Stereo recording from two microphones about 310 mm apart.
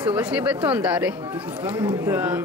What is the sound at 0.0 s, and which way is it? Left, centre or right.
Speech, centre.